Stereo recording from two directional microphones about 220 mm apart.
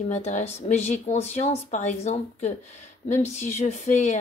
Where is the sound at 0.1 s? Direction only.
30° left (ahead or behind).